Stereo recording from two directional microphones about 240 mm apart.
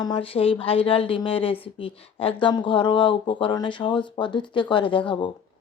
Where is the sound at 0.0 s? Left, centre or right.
Left.